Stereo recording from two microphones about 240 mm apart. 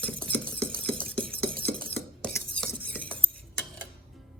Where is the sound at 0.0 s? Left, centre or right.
Centre.